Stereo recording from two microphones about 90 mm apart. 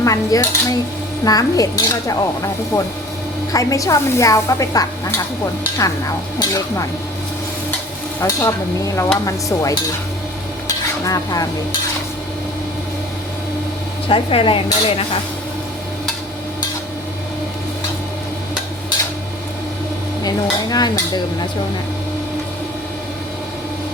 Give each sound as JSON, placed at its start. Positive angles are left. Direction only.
{"t": 0.0, "sound": "speech", "side_deg": 40}
{"t": 8.2, "sound": "speech", "side_deg": 35}
{"t": 10.7, "sound": "stir", "side_deg": 40}
{"t": 14.1, "sound": "speech", "side_deg": 80}
{"t": 20.2, "sound": "stir", "side_deg": 45}